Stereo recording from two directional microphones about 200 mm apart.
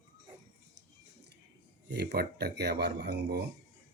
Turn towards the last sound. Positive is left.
turn(degrees=-55)  # may be behind; listen again after turning